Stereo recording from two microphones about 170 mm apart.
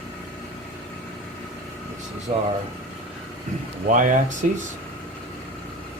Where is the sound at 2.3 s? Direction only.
50° right (ahead or behind).